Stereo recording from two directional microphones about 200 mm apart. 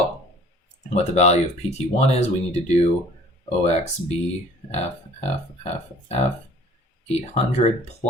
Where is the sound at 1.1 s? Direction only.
35° left (ahead or behind).